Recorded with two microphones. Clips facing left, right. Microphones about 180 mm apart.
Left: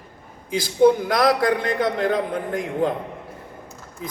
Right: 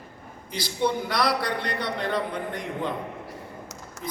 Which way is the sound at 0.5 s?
50° left (ahead or behind).